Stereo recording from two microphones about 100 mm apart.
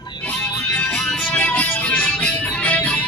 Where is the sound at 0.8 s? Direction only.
5° left (ahead or behind).